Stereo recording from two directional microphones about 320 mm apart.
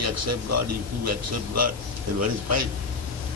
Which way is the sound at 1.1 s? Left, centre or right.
Right.